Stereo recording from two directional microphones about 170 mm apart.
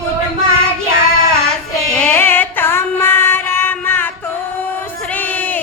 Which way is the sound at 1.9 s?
10° left (ahead or behind).